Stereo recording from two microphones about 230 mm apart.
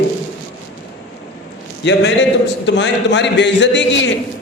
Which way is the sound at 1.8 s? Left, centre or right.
Left.